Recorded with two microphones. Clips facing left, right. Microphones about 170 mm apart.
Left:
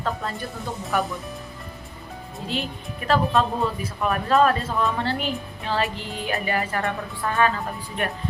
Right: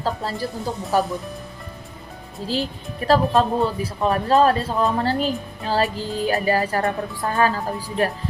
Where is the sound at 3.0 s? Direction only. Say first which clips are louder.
Right 4 dB; 35° right (ahead or behind).